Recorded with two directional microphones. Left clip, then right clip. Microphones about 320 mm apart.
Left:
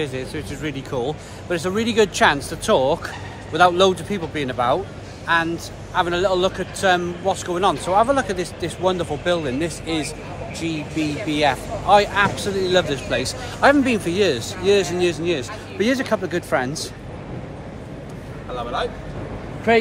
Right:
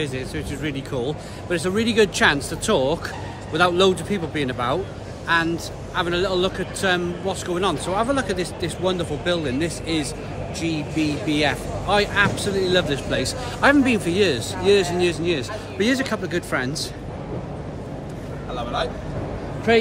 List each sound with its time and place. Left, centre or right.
0.0 s speech: centre
18.5 s vehicle: centre
19.7 s speech: left